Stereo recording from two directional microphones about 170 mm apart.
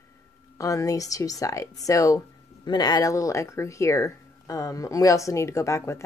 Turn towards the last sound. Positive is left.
turn(degrees=15)  # may be behind; listen again after turning